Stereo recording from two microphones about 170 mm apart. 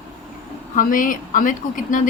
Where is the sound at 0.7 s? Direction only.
50° left (ahead or behind).